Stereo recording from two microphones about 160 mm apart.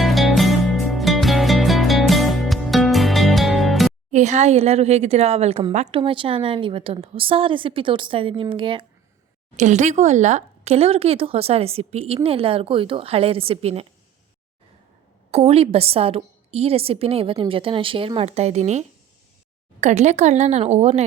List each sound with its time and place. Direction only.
0.0 s music: centre (ahead or behind)
4.1 s speech: 45° right (ahead or behind)
9.6 s speech: 45° right (ahead or behind)
15.3 s a woman's voice: 40° right (ahead or behind)